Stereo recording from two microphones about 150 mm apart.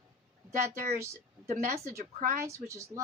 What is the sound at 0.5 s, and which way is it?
Speech, 60° right (ahead or behind).